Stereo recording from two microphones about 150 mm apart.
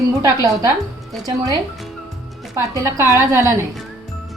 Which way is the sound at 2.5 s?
20° right (ahead or behind).